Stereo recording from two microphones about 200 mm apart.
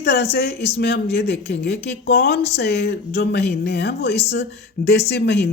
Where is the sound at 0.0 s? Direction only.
55° left (ahead or behind).